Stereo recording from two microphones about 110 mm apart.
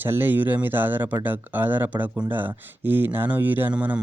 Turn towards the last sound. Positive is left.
turn(degrees=-10)  # may be behind; listen again after turning